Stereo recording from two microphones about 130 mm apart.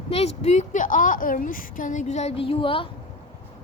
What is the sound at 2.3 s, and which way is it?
Speech, 45° left (ahead or behind).